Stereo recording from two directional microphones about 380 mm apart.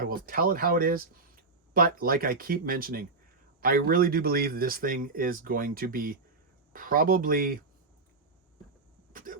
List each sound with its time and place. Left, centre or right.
0.1 s speech: right
9.1 s cough: right